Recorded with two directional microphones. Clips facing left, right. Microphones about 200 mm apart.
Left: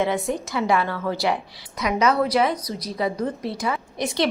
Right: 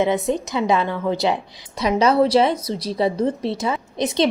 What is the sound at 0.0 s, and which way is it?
A woman's voice, 20° right (ahead or behind).